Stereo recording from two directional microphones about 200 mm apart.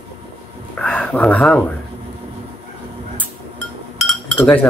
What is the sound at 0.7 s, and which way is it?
Speech, 5° left (ahead or behind).